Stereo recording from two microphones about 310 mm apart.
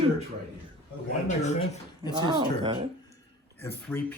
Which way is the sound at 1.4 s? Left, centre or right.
Left.